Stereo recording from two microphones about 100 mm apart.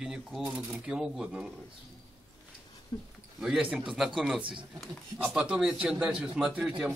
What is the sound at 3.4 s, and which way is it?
A man's voice, 10° right (ahead or behind).